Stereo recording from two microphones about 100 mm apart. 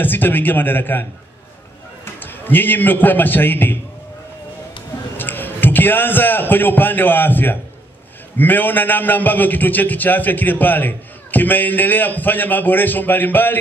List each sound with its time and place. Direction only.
0.0 s a man's voice: 20° left (ahead or behind)
2.1 s a man's voice: 20° left (ahead or behind)
5.1 s a man's voice: 20° left (ahead or behind)